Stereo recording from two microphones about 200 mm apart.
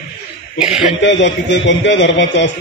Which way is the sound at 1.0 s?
65° left (ahead or behind).